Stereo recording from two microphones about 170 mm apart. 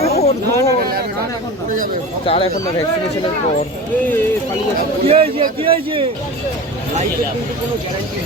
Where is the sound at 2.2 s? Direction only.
30° left (ahead or behind).